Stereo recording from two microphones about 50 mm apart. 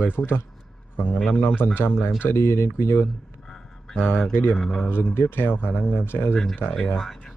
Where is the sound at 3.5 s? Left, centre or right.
Centre.